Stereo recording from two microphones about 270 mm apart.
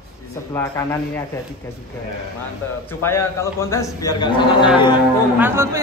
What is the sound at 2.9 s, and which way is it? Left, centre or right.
A man's voice, centre.